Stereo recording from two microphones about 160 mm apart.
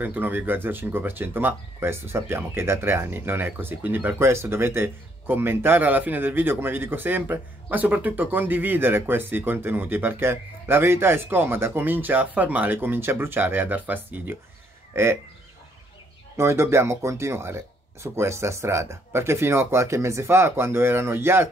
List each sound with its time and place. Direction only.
0.0 s speech: 10° right (ahead or behind)
16.3 s speech: 15° right (ahead or behind)